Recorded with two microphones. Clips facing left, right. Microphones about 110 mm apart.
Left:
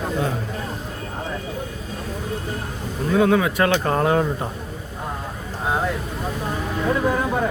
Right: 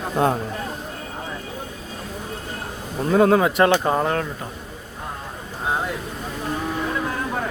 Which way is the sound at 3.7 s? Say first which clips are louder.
Right 1 dB; 15° right (ahead or behind).